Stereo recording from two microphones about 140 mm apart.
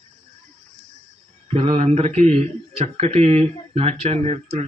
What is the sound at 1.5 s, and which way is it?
A man's voice, 45° right (ahead or behind).